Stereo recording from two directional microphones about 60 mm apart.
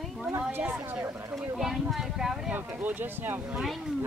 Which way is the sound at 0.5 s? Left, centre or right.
Right.